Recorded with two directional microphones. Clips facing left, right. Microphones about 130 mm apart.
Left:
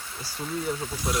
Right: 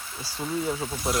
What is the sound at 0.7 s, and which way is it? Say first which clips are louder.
Speech: right 2 dB; 10° right (ahead or behind).